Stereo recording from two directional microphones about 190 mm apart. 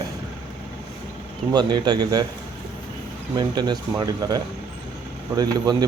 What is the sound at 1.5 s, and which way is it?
Speech, 20° right (ahead or behind).